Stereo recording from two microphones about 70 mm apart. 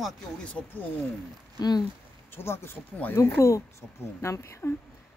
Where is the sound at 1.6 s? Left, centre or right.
Left.